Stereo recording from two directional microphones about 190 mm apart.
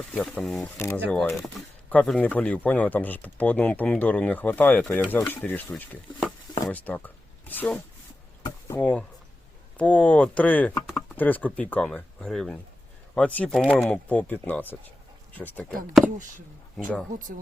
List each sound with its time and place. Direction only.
0.1 s speech: 5° left (ahead or behind)
0.8 s speech: 15° left (ahead or behind)
1.1 s speech: 5° left (ahead or behind)
16.0 s speech: 40° right (ahead or behind)
16.7 s speech: 5° left (ahead or behind)